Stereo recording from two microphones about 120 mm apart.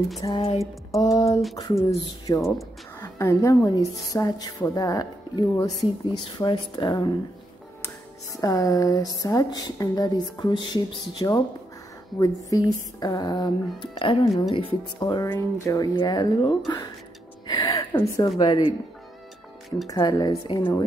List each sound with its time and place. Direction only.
0.3 s speech: 50° left (ahead or behind)
0.9 s a woman's voice: 25° left (ahead or behind)
8.4 s a woman's voice: 30° left (ahead or behind); by 14.8 s 50° left (ahead or behind)
15.0 s a woman's voice: 35° left (ahead or behind)
15.2 s speech: 20° left (ahead or behind)
16.0 s a woman's voice: 35° left (ahead or behind)
17.5 s music: 30° left (ahead or behind)
18.4 s a woman's voice: 40° left (ahead or behind)
19.9 s a woman's voice: 35° left (ahead or behind)